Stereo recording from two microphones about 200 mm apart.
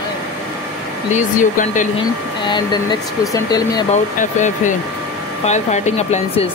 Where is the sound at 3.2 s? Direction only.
20° left (ahead or behind).